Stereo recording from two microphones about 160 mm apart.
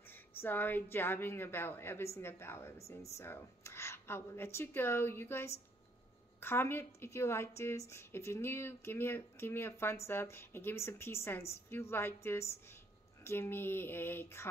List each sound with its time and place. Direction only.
0.1 s a woman's voice: 10° left (ahead or behind)